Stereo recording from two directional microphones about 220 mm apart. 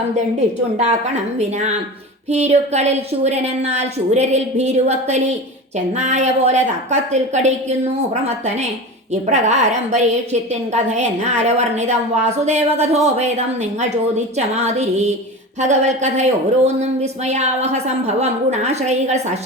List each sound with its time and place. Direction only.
2.3 s a woman's voice: 30° right (ahead or behind)
9.3 s a woman's voice: 30° right (ahead or behind)